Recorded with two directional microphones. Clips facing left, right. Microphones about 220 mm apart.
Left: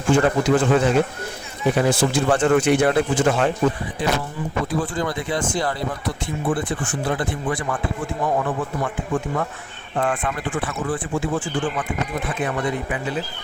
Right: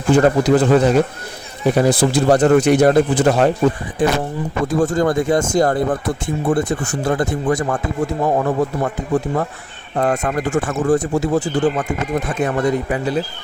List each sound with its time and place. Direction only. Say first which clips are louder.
0.1 s speech: right 4 dB; 35° right (ahead or behind)
4.0 s speech: right 6 dB; 50° right (ahead or behind)